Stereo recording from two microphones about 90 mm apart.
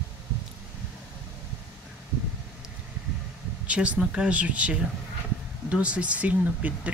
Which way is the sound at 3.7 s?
15° right (ahead or behind).